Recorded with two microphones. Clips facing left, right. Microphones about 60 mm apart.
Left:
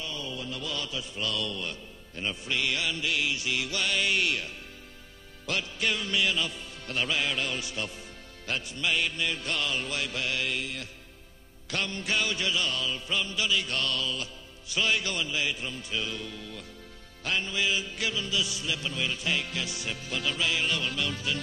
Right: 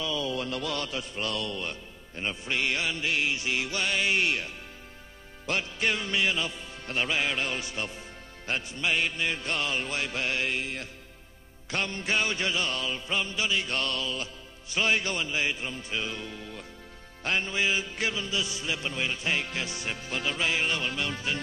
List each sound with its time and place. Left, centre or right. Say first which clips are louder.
0.2 s music: right 5 dB; right
5.5 s music: right 2 dB; right